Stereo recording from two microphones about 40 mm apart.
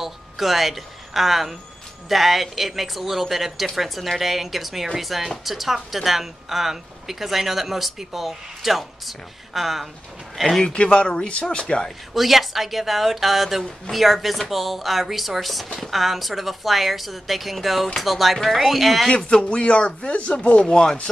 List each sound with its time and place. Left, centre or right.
0.0 s a woman's voice: centre
10.6 s speech: left
11.4 s speech: centre
12.1 s a woman's voice: centre
19.1 s speech: left
20.7 s speech: centre